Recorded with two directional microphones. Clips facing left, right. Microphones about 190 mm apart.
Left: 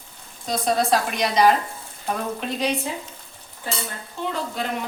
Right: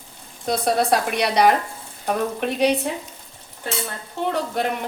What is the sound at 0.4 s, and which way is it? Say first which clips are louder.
A woman's voice: right 2 dB; 65° right (ahead or behind).